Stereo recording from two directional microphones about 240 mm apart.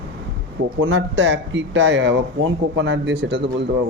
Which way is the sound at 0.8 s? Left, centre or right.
Right.